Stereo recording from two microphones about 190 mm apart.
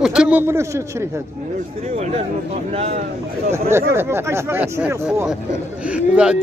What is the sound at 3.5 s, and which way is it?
Speech, 15° right (ahead or behind).